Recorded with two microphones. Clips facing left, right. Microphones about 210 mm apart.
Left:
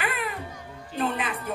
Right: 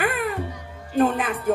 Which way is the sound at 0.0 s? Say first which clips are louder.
Right 6 dB; 45° right (ahead or behind).